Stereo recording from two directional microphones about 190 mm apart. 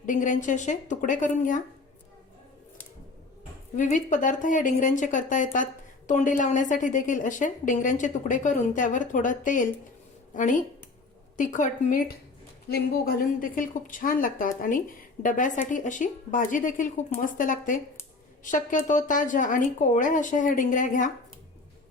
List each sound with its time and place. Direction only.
0.0 s a woman's voice: 45° left (ahead or behind)
3.8 s a woman's voice: 40° left (ahead or behind)